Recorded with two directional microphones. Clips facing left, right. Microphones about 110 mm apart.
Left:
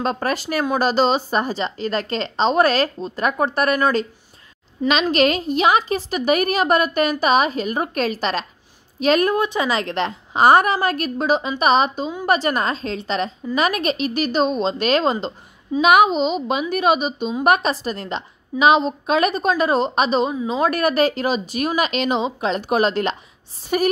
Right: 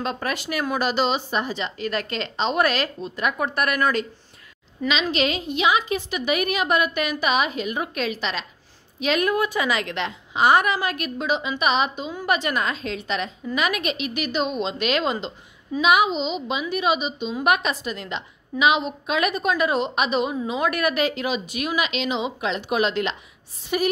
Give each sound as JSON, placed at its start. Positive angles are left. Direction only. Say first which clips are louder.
{"t": 0.0, "sound": "a woman's voice", "louder": "left 5 dB", "side_deg": 40}
{"t": 5.1, "sound": "a woman's voice", "louder": "left 6 dB", "side_deg": 50}
{"t": 9.4, "sound": "a woman's voice", "louder": "left 3 dB", "side_deg": 25}
{"t": 15.8, "sound": "a woman's voice", "louder": "left 5 dB", "side_deg": 50}